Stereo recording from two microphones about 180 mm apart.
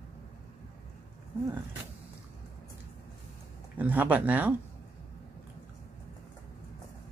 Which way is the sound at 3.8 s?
10° right (ahead or behind).